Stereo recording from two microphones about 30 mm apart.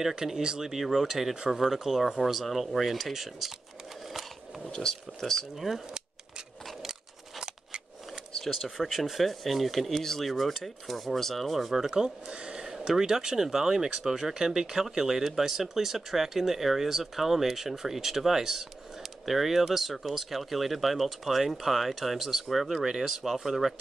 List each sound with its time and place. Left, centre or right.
0.2 s speech: centre
4.7 s speech: centre
5.7 s speech: centre
6.8 s a sound: centre
8.7 s speech: centre
11.5 s speech: centre
11.9 s speech: right
12.6 s a sound: centre
13.0 s speech: right; by 22.8 s centre
22.8 s speech: centre